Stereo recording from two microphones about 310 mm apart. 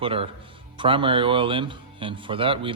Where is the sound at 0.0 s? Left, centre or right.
Centre.